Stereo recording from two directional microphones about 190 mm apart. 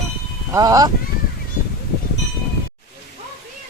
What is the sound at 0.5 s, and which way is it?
Speech, 20° right (ahead or behind).